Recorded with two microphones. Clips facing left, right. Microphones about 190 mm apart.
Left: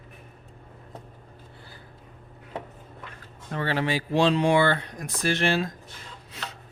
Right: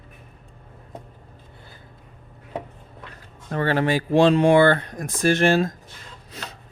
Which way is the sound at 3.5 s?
50° right (ahead or behind).